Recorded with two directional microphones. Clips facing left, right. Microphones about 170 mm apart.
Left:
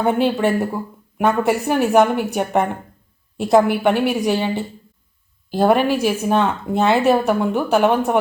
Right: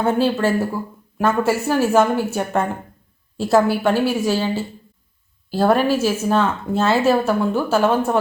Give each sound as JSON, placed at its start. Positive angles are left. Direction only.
{"t": 0.0, "sound": "a woman's voice", "side_deg": 15}